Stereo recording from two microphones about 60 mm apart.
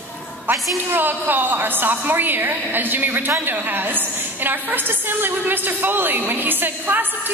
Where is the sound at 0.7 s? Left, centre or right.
Right.